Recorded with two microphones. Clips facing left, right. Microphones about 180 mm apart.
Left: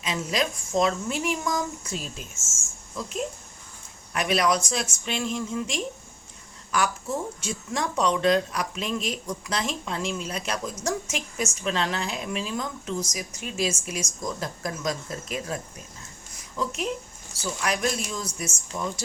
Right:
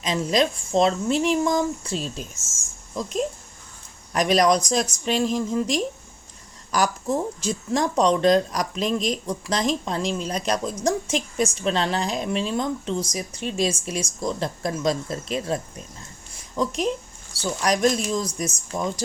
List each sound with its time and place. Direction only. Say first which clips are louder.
0.0 s a woman's voice: right 6 dB; 35° right (ahead or behind)
4.1 s a woman's voice: right 5 dB; 35° right (ahead or behind)
16.3 s a sound: right 5 dB; 35° right (ahead or behind)
17.3 s a woman's voice: right 5 dB; 35° right (ahead or behind)